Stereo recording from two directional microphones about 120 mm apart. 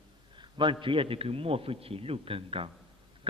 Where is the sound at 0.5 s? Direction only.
45° right (ahead or behind).